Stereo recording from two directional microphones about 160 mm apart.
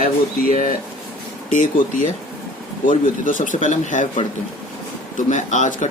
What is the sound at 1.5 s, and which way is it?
Speech, 50° left (ahead or behind).